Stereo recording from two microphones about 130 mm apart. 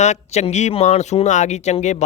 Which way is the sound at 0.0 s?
60° left (ahead or behind).